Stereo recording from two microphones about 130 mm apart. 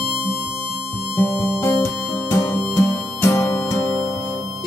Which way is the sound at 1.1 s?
15° left (ahead or behind).